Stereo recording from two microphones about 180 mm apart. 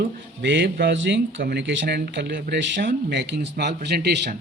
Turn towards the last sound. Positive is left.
turn(degrees=-65)  # may be behind; listen again after turning